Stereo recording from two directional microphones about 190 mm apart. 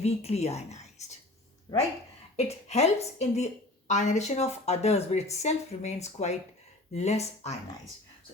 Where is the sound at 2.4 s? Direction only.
35° left (ahead or behind).